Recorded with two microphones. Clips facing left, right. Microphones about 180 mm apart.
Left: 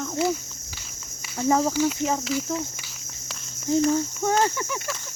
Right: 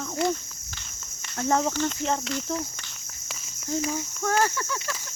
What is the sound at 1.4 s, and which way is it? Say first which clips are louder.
Speech: left 3 dB; 5° left (ahead or behind).